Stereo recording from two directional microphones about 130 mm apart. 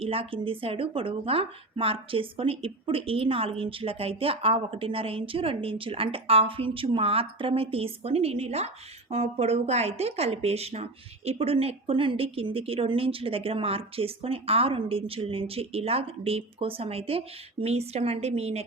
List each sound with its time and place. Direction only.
0.0 s speech: 45° right (ahead or behind)